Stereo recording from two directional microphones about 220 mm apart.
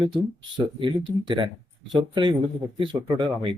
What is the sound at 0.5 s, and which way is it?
Speech, 20° right (ahead or behind).